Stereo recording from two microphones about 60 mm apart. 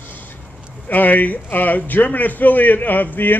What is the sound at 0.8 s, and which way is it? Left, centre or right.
A man's voice, left.